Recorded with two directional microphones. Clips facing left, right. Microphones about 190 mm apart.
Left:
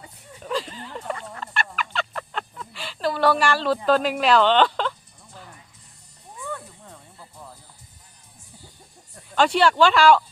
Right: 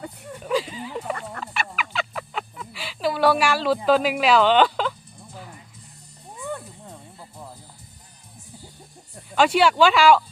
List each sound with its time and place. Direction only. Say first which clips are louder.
0.0 s speech: right 9 dB; 60° right (ahead or behind)
0.4 s speech: right 4 dB; 5° right (ahead or behind)
1.4 s fowl: even; 5° right (ahead or behind)
6.4 s snake: right 2 dB; 20° right (ahead or behind)
9.3 s speech: right 1 dB; 5° right (ahead or behind)